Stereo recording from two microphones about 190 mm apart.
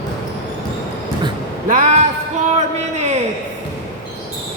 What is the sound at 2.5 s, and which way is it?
Speech, 35° right (ahead or behind).